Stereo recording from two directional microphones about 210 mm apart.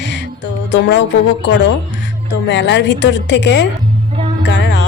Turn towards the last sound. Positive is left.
turn(degrees=55)  # may be behind; listen again after turning